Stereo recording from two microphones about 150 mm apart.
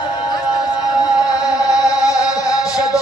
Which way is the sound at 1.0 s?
25° left (ahead or behind).